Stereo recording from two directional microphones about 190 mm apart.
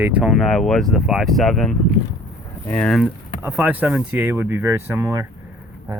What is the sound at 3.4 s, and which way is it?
Speech, 10° right (ahead or behind).